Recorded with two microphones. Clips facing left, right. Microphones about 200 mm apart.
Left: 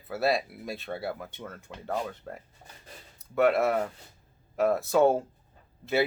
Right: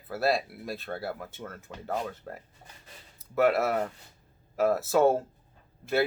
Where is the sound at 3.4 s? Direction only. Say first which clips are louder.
Left 1 dB; centre (ahead or behind).